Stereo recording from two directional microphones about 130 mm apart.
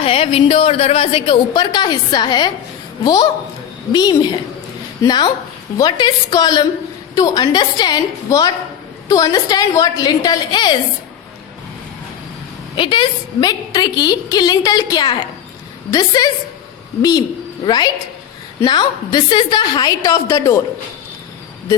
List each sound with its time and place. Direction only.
0.0 s a woman's voice: 45° left (ahead or behind)
12.7 s a woman's voice: 40° left (ahead or behind); by 20.6 s 25° left (ahead or behind)